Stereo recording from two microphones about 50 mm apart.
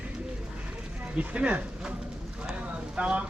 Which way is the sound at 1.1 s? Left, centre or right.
Right.